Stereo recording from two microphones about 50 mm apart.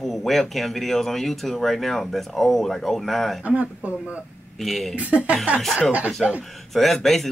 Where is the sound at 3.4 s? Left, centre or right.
Right.